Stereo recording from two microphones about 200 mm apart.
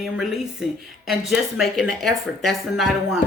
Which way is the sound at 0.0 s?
Centre (ahead or behind).